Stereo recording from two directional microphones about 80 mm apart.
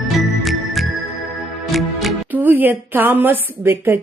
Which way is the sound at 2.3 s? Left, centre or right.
Right.